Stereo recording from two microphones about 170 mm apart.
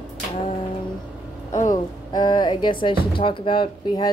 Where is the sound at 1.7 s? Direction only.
25° left (ahead or behind).